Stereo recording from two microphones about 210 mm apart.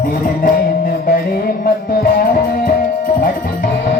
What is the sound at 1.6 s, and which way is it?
Music, 45° left (ahead or behind).